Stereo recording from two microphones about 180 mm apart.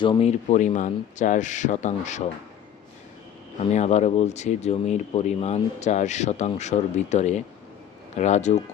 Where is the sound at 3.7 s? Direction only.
40° left (ahead or behind).